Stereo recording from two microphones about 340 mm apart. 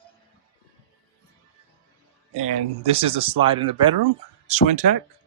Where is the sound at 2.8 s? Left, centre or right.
Centre.